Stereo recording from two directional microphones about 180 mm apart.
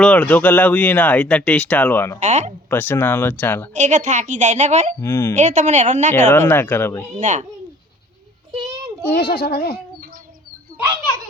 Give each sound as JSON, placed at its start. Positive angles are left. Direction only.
{"t": 0.0, "sound": "speech", "side_deg": 5}
{"t": 2.1, "sound": "a woman's voice", "side_deg": -40}
{"t": 2.6, "sound": "speech", "side_deg": 10}
{"t": 3.8, "sound": "a woman's voice", "side_deg": -40}
{"t": 4.9, "sound": "speech", "side_deg": 15}
{"t": 5.3, "sound": "a woman's voice", "side_deg": -40}
{"t": 6.3, "sound": "speech", "side_deg": 10}
{"t": 7.2, "sound": "a child's voice", "side_deg": -45}
{"t": 9.0, "sound": "a child's voice", "side_deg": 60}